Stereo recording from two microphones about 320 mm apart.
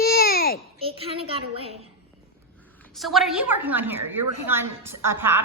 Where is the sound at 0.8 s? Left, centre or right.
Centre.